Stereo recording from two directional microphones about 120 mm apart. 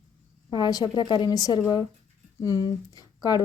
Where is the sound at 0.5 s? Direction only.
35° left (ahead or behind).